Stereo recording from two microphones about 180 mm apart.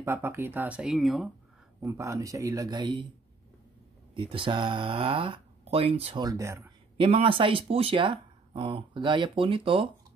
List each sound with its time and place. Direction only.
0.0 s speech: 15° right (ahead or behind)
1.8 s speech: 15° right (ahead or behind)
4.1 s speech: 30° right (ahead or behind)
6.2 s speech: 15° right (ahead or behind)
7.0 s speech: 30° right (ahead or behind)